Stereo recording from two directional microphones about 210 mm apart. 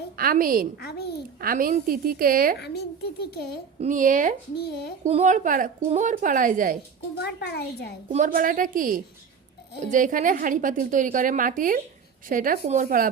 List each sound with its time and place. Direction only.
0.2 s a woman's voice: 45° right (ahead or behind)
0.8 s a child's voice: 50° left (ahead or behind)
1.4 s a woman's voice: 45° right (ahead or behind)
2.6 s a child's voice: 50° left (ahead or behind)
3.8 s a woman's voice: 35° right (ahead or behind)
4.5 s a child's voice: 50° left (ahead or behind)
5.0 s a woman's voice: 30° right (ahead or behind)
7.2 s a child's voice: 50° left (ahead or behind)
8.1 s a woman's voice: 40° right (ahead or behind)